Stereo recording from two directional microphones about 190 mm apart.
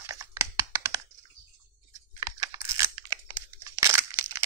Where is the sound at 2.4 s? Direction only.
20° right (ahead or behind).